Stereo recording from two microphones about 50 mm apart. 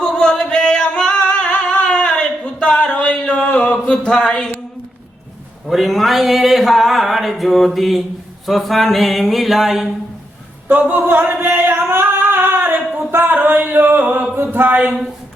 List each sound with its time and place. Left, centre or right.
0.2 s singing: centre
4.3 s a woman's voice: centre
5.6 s a sound: centre
10.7 s singing: right